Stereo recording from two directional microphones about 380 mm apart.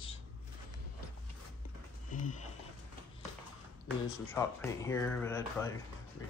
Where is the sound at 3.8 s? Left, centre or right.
Centre.